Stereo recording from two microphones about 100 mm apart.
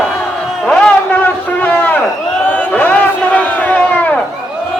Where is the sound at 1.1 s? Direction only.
20° left (ahead or behind).